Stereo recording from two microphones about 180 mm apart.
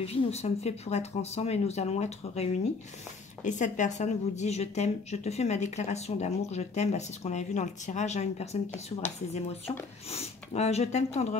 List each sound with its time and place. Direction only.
0.0 s speech: 35° left (ahead or behind)
3.4 s speech: 45° left (ahead or behind)